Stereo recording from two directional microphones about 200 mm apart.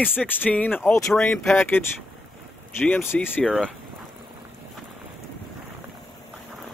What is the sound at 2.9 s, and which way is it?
Speech, 10° left (ahead or behind).